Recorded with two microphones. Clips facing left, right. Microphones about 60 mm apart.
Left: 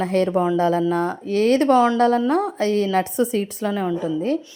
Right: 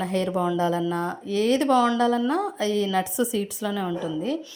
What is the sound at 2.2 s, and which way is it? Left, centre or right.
A woman's voice, left.